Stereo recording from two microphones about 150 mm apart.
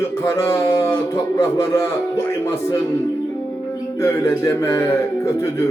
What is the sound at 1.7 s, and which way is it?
A man's voice, 15° left (ahead or behind).